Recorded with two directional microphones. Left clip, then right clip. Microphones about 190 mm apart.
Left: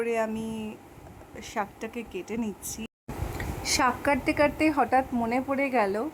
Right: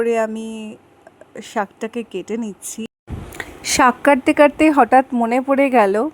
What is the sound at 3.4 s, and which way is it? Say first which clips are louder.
A woman's voice: right 11 dB; 40° right (ahead or behind).